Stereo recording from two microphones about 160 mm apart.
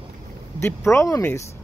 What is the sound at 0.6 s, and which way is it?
Speech, 15° left (ahead or behind).